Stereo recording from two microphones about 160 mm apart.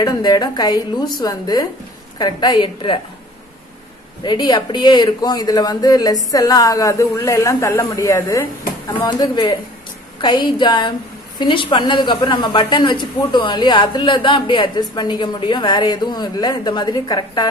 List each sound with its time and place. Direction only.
0.0 s a woman's voice: 25° left (ahead or behind)
4.2 s a woman's voice: 25° left (ahead or behind)